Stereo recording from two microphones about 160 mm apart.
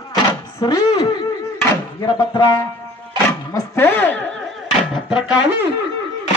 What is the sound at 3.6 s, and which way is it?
Speech, 10° left (ahead or behind).